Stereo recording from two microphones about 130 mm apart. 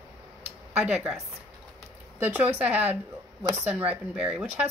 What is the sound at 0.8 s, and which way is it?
Speech, 5° right (ahead or behind).